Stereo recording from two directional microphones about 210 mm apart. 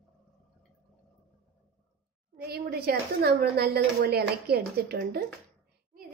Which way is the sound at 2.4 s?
45° right (ahead or behind).